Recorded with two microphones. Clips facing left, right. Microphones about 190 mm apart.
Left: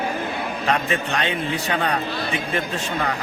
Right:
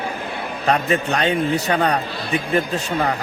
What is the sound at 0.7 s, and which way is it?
Speech, 40° right (ahead or behind).